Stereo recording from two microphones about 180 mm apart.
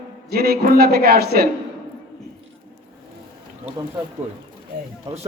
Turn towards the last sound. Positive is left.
turn(degrees=-20)  # may be behind; listen again after turning